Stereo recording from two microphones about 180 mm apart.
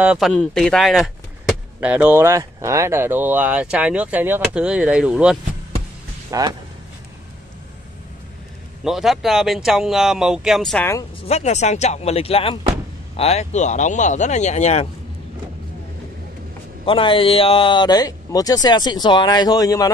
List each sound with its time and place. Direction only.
0.0 s speech: 5° right (ahead or behind)
0.3 s speech: 5° left (ahead or behind)
6.3 s speech: 20° right (ahead or behind)
8.8 s speech: centre (ahead or behind)
11.2 s speech: 35° left (ahead or behind)
16.8 s speech: 30° left (ahead or behind)